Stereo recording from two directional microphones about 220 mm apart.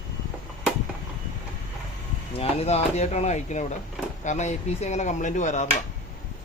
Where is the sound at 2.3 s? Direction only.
30° left (ahead or behind).